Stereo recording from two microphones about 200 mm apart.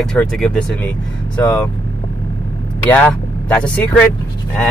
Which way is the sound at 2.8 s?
5° left (ahead or behind).